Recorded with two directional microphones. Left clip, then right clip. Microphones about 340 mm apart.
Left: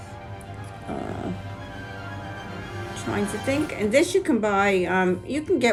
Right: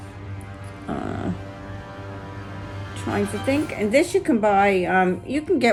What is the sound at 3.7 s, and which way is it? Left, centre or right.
Speech, centre.